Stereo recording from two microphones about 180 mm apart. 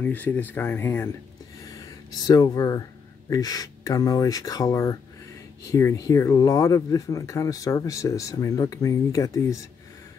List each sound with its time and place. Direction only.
0.0 s speech: 10° left (ahead or behind)
1.6 s a sound: 20° left (ahead or behind)
3.3 s speech: 20° left (ahead or behind)